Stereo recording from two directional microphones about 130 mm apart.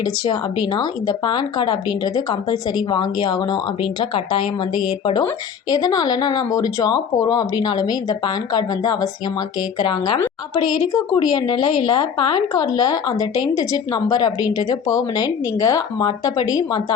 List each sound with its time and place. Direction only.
0.0 s speech: 35° left (ahead or behind)